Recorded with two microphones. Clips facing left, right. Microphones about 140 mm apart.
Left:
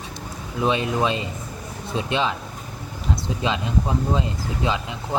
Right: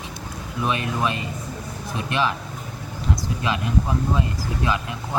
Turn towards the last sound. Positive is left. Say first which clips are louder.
# even
turn(degrees=25)  # may be behind; listen again after turning